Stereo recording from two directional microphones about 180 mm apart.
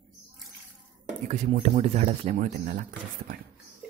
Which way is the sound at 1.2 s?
40° right (ahead or behind).